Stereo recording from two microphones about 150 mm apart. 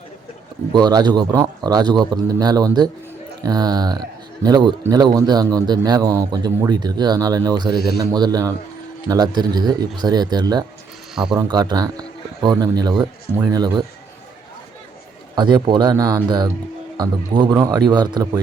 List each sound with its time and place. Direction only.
0.7 s a man's voice: 25° right (ahead or behind)
11.1 s speech: 5° right (ahead or behind)
11.3 s a man's voice: 25° right (ahead or behind)
15.4 s a man's voice: 30° right (ahead or behind)